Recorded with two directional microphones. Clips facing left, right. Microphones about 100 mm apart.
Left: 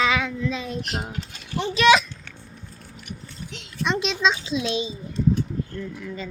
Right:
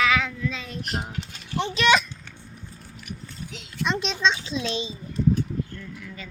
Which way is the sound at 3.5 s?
Centre (ahead or behind).